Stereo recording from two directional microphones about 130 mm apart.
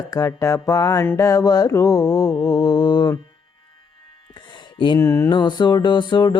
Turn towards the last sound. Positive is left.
turn(degrees=35)  # may be behind; listen again after turning